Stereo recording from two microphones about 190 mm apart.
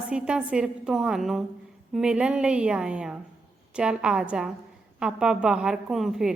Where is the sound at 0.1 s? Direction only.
5° right (ahead or behind).